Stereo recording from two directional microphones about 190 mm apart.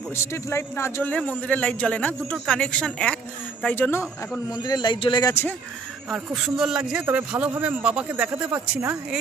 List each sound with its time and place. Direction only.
0.1 s a man's voice: 15° left (ahead or behind)
4.6 s speech: 25° left (ahead or behind)
6.0 s a man's voice: centre (ahead or behind)